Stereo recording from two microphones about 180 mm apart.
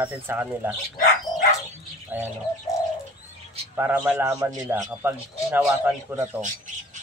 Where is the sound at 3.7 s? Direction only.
10° right (ahead or behind).